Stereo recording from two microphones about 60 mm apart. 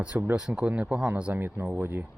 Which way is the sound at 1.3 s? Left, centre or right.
Right.